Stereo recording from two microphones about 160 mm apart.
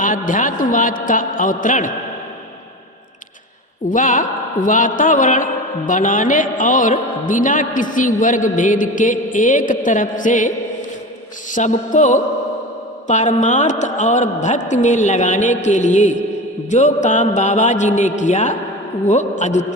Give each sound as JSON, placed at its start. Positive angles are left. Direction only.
{"t": 0.0, "sound": "a man's voice", "side_deg": 55}
{"t": 3.8, "sound": "a man's voice", "side_deg": 55}
{"t": 11.5, "sound": "a woman's voice", "side_deg": 50}